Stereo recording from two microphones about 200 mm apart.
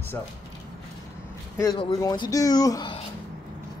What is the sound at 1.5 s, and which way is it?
Speech, 20° left (ahead or behind).